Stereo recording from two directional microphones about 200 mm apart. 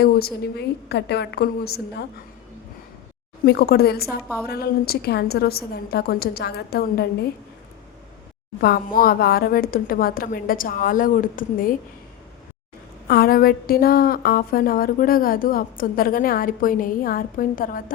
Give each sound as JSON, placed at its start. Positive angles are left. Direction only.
{"t": 0.0, "sound": "a woman's voice", "side_deg": 50}
{"t": 3.4, "sound": "a woman's voice", "side_deg": 50}
{"t": 8.6, "sound": "a woman's voice", "side_deg": 50}
{"t": 13.1, "sound": "a woman's voice", "side_deg": 50}